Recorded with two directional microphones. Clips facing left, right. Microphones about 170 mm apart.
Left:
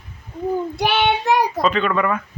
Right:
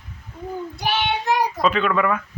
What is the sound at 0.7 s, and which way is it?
Child singing, 65° left (ahead or behind).